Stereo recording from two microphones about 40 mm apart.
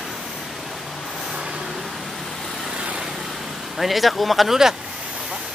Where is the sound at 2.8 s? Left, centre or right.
Right.